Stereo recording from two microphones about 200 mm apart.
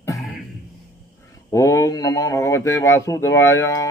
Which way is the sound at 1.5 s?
15° left (ahead or behind).